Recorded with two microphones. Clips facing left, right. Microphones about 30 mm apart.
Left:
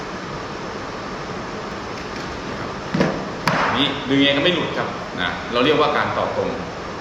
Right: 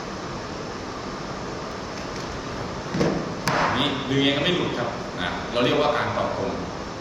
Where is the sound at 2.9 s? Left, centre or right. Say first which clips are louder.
Left 3 dB; left.